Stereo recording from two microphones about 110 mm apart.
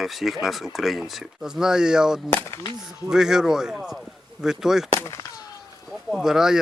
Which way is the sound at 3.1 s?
5° right (ahead or behind).